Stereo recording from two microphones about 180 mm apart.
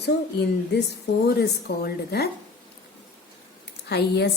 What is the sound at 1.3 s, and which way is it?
Speech, 65° left (ahead or behind).